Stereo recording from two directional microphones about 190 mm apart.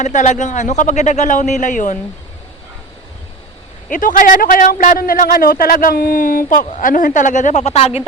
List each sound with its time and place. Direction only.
0.0 s a man's voice: 40° left (ahead or behind)
3.8 s a man's voice: 45° left (ahead or behind)